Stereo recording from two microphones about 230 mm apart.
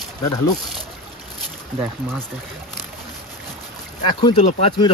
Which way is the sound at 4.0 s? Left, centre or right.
Centre.